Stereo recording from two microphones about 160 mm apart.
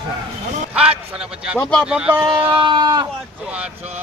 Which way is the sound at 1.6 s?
5° left (ahead or behind).